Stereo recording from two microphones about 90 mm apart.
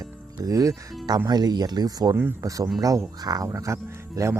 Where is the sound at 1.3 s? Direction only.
50° right (ahead or behind).